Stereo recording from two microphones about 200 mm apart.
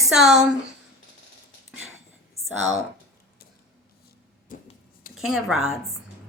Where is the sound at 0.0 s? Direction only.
Centre (ahead or behind).